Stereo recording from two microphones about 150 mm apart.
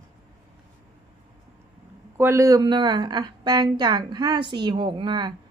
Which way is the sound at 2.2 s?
15° right (ahead or behind).